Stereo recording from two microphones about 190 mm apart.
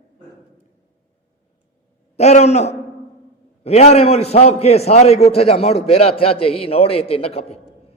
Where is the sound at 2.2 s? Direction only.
35° left (ahead or behind).